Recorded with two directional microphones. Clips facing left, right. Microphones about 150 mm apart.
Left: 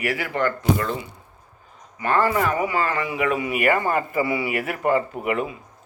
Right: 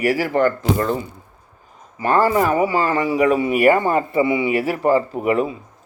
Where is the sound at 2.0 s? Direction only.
35° right (ahead or behind).